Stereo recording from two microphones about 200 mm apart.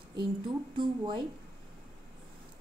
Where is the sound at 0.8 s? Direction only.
25° right (ahead or behind).